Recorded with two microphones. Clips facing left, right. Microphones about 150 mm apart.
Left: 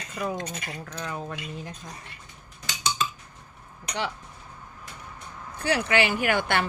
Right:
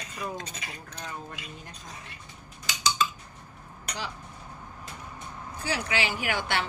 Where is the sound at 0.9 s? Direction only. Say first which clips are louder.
Left 6 dB; 90° left.